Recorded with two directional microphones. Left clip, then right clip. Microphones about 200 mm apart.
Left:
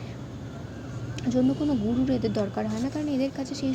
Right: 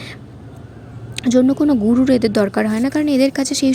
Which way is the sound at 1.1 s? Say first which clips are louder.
Right 11 dB; 40° right (ahead or behind).